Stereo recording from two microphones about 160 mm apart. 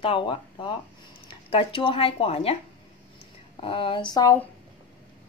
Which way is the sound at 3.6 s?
35° left (ahead or behind).